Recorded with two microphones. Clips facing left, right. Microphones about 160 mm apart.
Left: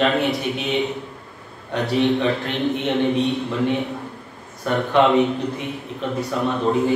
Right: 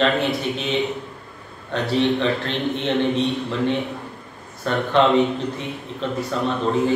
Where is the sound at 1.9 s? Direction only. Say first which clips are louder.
Left 1 dB; 15° left (ahead or behind).